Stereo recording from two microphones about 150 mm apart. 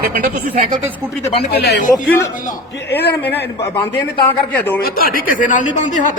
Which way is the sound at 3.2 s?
15° left (ahead or behind).